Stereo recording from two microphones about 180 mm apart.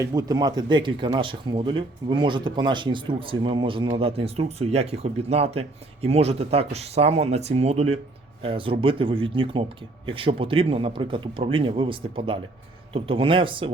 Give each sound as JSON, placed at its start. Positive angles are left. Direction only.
{"t": 0.0, "sound": "speech", "side_deg": -20}